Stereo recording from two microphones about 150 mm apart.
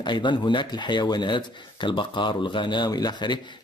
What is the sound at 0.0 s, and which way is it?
Speech, 30° left (ahead or behind).